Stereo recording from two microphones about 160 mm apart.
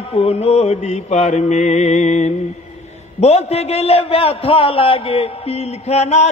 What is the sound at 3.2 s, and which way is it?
A man's voice, 40° left (ahead or behind).